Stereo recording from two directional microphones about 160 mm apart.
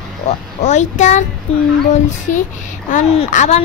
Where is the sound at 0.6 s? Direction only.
45° left (ahead or behind).